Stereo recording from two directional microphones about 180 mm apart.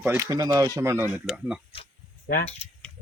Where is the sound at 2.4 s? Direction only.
35° left (ahead or behind).